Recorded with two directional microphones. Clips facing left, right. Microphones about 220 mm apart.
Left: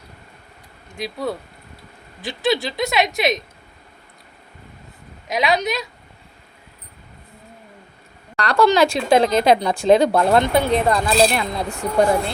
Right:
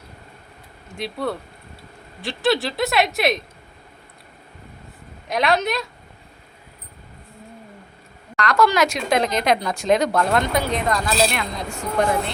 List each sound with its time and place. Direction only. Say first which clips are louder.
0.9 s a woman's voice: even; centre (ahead or behind)
5.3 s a woman's voice: even; centre (ahead or behind)
8.4 s speech: left 3 dB; 30° left (ahead or behind)